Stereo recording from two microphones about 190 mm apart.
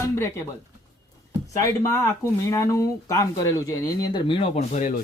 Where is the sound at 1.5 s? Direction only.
15° left (ahead or behind).